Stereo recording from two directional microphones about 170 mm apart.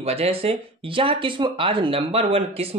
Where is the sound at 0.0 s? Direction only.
35° right (ahead or behind).